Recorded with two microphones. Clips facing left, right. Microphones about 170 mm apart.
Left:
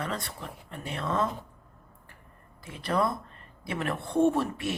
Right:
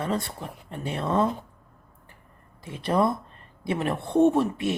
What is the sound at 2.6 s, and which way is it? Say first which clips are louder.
Speech: right 4 dB; 25° right (ahead or behind).